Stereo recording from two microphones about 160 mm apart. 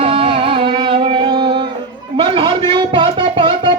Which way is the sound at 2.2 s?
30° right (ahead or behind).